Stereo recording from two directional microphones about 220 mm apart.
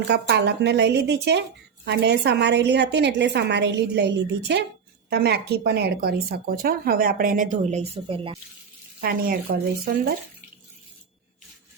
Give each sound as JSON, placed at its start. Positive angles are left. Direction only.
{"t": 0.1, "sound": "speech", "side_deg": -50}
{"t": 9.0, "sound": "speech", "side_deg": -40}